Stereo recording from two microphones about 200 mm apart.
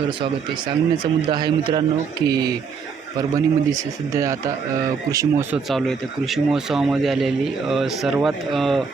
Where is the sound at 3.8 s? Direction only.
15° right (ahead or behind).